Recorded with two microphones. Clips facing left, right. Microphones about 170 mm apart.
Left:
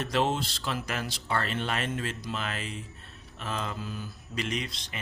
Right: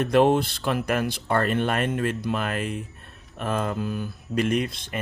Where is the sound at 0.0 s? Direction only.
55° right (ahead or behind).